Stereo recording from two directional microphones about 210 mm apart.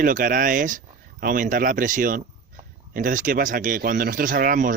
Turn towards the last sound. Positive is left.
turn(degrees=-40)  # may be behind; listen again after turning